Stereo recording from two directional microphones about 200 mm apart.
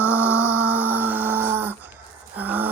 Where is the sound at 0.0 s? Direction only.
5° right (ahead or behind).